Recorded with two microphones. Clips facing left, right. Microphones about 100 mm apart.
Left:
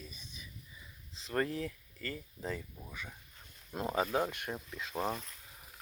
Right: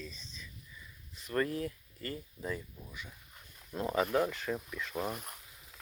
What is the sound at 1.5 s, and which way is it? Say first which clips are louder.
Speech: right 2 dB; 40° right (ahead or behind).